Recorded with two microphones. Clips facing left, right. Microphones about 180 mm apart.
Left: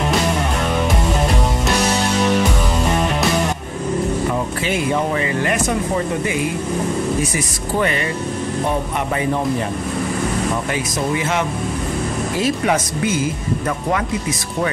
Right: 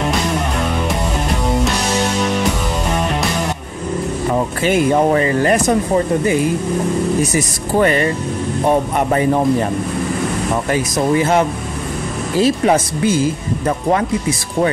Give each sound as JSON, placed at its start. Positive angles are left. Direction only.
{"t": 4.6, "sound": "speech", "side_deg": -40}
{"t": 7.3, "sound": "speech", "side_deg": -40}
{"t": 10.7, "sound": "speech", "side_deg": -40}